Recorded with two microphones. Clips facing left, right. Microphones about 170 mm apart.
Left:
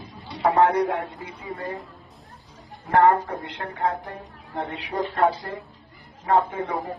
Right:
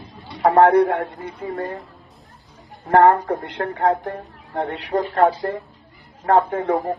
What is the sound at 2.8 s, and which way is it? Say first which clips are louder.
A man's voice: right 4 dB; 65° right (ahead or behind).